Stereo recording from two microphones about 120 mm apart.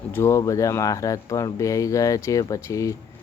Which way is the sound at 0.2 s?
25° left (ahead or behind).